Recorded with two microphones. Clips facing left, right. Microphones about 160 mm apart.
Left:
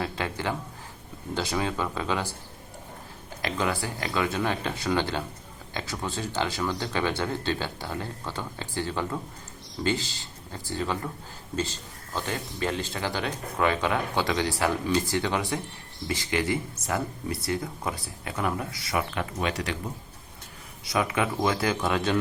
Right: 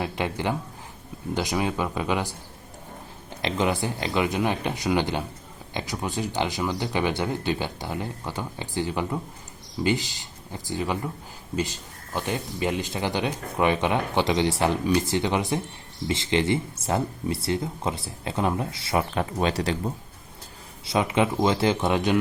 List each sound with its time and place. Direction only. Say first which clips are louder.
0.0 s speech: right 3 dB; 20° right (ahead or behind)
3.4 s speech: right 4 dB; 20° right (ahead or behind)
20.8 s speech: right 4 dB; 25° right (ahead or behind)